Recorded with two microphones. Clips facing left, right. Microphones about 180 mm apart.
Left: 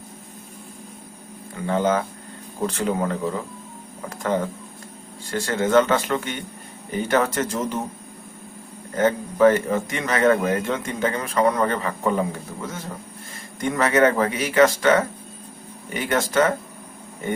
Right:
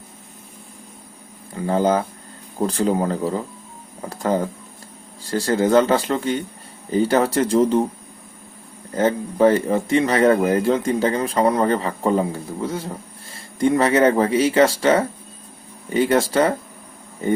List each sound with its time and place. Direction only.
1.5 s speech: 35° right (ahead or behind)
9.0 s speech: 30° right (ahead or behind)